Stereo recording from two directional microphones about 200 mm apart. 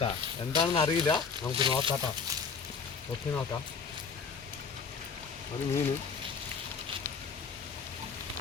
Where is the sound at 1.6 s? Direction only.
25° right (ahead or behind).